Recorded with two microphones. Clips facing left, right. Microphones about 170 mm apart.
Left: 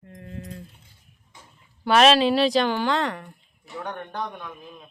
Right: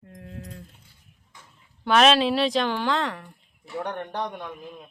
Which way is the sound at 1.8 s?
Centre (ahead or behind).